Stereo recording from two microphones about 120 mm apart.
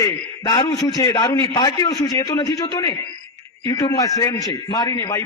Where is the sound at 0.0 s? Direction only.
35° left (ahead or behind).